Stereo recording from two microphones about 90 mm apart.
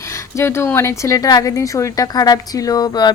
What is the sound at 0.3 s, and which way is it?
Speech, 30° left (ahead or behind).